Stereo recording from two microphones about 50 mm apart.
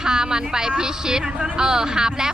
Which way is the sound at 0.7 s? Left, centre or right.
Centre.